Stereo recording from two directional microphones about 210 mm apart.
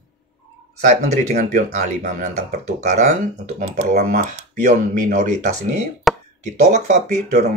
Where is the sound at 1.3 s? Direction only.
35° right (ahead or behind).